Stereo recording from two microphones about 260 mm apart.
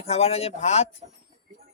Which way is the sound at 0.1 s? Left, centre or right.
Left.